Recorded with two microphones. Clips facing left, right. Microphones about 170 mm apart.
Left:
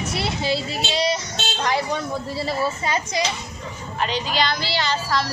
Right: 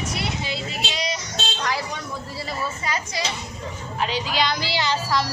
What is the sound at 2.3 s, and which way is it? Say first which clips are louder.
Speech: left 5 dB; 30° left (ahead or behind).